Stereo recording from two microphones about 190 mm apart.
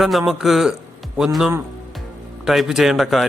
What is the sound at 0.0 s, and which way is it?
A man's voice, centre (ahead or behind).